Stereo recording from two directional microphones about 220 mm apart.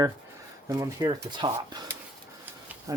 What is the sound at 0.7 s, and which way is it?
Speech, 15° right (ahead or behind).